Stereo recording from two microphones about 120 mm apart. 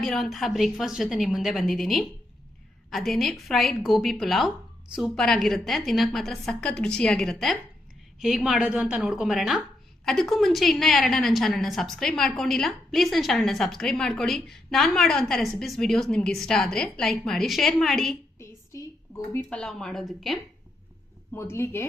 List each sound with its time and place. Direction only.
0.0 s a woman's voice: centre (ahead or behind)
18.3 s a sound: 25° left (ahead or behind)
19.5 s a woman's voice: 5° left (ahead or behind)
21.3 s speech: 20° left (ahead or behind)